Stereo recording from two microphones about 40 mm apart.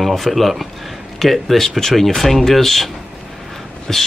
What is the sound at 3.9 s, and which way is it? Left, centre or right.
Speech, centre.